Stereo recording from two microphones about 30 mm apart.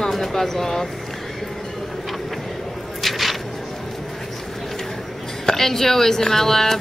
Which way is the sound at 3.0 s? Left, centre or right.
Centre.